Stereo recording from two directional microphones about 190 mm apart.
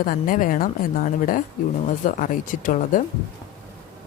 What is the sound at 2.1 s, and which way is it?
Speech, 45° left (ahead or behind).